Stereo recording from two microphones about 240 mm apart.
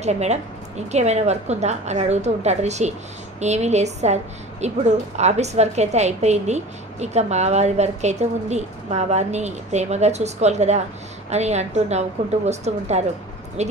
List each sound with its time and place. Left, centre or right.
0.0 s a woman's voice: right